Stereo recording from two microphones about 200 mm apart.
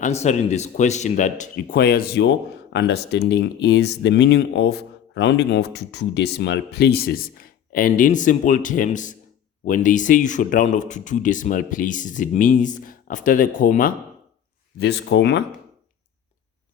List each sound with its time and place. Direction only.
0.0 s speech: 35° left (ahead or behind)
14.8 s speech: 55° left (ahead or behind)